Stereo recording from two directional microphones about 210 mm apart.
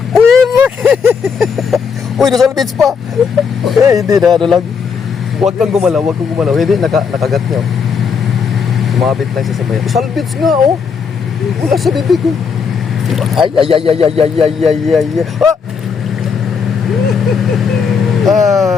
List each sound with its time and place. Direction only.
0.1 s a sound: centre (ahead or behind)
0.5 s vehicle: 5° right (ahead or behind)
2.3 s a man's voice: centre (ahead or behind)
3.8 s speech: 15° right (ahead or behind)
4.2 s a man's voice: centre (ahead or behind)
8.8 s a man's voice: centre (ahead or behind)
11.6 s a man's voice: centre (ahead or behind)
13.7 s speech: 25° right (ahead or behind)
14.6 s a man's voice: centre (ahead or behind)
18.2 s a man's voice: centre (ahead or behind)